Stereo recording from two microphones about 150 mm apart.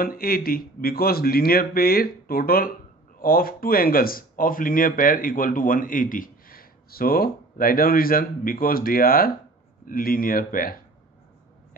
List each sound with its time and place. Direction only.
0.0 s speech: 75° left (ahead or behind)